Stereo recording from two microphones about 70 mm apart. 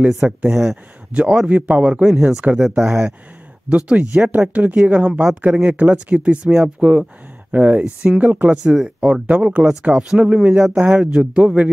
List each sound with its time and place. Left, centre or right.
0.1 s speech: centre
2.5 s speech: centre
3.6 s speech: centre